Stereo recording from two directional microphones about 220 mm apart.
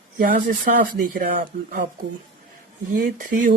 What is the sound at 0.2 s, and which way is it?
Speech, 40° right (ahead or behind).